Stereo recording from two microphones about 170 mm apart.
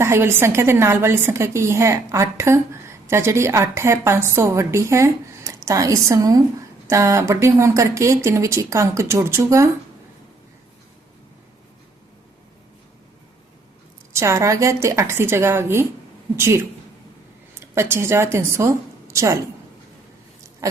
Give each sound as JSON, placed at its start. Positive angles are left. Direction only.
{"t": 0.0, "sound": "a woman's voice", "side_deg": -15}
{"t": 14.1, "sound": "a woman's voice", "side_deg": -15}
{"t": 17.6, "sound": "a woman's voice", "side_deg": -15}